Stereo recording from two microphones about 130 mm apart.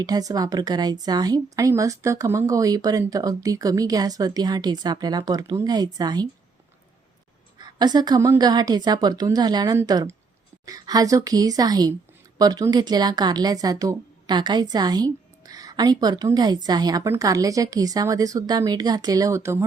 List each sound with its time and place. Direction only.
0.0 s a woman's voice: 30° right (ahead or behind)
7.6 s a woman's voice: 30° right (ahead or behind)